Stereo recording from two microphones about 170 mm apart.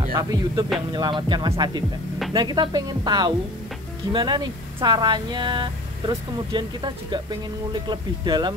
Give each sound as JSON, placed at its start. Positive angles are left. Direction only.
{"t": 0.0, "sound": "speech", "side_deg": -25}